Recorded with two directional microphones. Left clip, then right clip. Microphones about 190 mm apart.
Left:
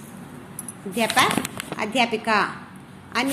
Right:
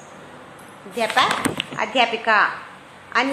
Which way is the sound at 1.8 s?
30° left (ahead or behind).